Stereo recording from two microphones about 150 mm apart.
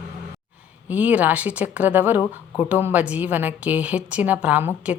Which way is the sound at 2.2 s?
25° left (ahead or behind).